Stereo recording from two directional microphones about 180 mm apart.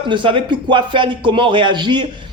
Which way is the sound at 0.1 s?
25° right (ahead or behind).